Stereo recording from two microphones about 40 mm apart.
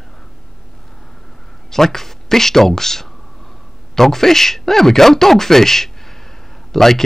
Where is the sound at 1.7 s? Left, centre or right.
Centre.